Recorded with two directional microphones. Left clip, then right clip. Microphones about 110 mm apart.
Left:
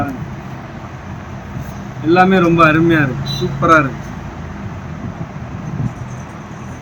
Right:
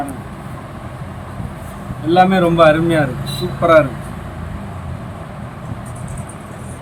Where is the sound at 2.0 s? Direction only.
20° right (ahead or behind).